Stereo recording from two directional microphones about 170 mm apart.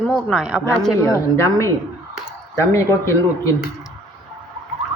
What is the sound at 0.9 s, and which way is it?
Speech, 15° left (ahead or behind).